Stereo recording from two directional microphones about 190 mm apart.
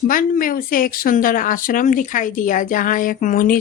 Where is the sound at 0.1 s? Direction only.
45° left (ahead or behind).